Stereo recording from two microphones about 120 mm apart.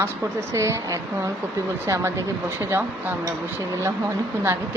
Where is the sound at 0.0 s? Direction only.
25° right (ahead or behind).